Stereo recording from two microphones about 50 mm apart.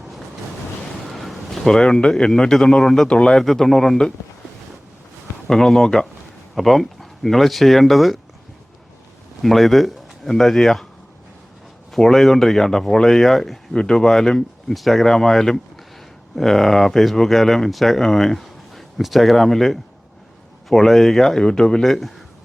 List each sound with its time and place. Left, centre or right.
1.1 s a sound: centre
1.7 s speech: centre
3.1 s speech: centre
3.4 s speech: centre
5.5 s speech: centre
9.4 s speech: centre
11.9 s speech: centre